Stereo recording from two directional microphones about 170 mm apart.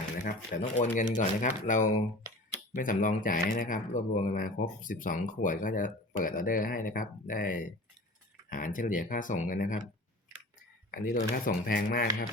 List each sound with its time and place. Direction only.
0.5 s speech: 50° left (ahead or behind)
10.9 s speech: 55° left (ahead or behind)